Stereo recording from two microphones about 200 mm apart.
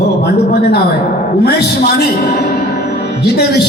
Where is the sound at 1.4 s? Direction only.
50° left (ahead or behind).